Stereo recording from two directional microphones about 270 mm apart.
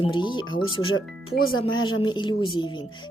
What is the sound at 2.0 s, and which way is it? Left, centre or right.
Speech, centre.